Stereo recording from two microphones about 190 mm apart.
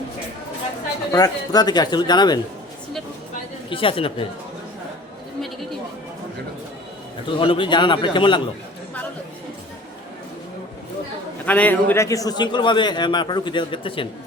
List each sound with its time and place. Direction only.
1.1 s a man's voice: 20° left (ahead or behind)
3.7 s a man's voice: 30° left (ahead or behind)
7.3 s a man's voice: 25° left (ahead or behind)
11.4 s a man's voice: 10° left (ahead or behind); by 14.1 s 25° left (ahead or behind)